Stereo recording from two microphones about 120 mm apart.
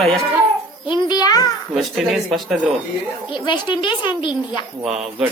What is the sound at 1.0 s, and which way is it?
Speech, 35° left (ahead or behind).